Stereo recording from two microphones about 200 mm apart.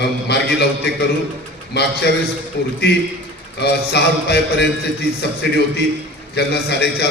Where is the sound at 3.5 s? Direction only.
55° left (ahead or behind).